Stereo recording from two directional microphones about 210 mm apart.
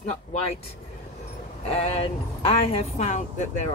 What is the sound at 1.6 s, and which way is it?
Speech, 30° left (ahead or behind).